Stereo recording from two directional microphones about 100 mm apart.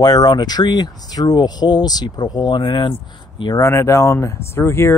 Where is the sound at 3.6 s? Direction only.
30° left (ahead or behind).